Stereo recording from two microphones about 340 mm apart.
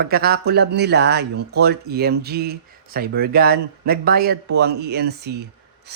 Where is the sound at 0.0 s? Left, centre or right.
Right.